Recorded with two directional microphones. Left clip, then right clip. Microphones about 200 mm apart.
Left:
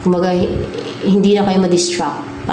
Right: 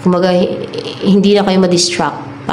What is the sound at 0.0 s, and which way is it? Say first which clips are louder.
Speech: right 4 dB; 15° right (ahead or behind).